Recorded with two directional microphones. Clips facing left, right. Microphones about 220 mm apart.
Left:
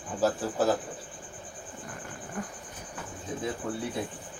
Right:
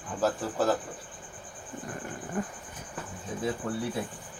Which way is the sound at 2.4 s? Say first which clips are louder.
Right 4 dB; 25° right (ahead or behind).